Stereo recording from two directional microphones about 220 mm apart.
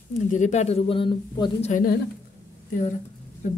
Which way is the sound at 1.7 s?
40° left (ahead or behind).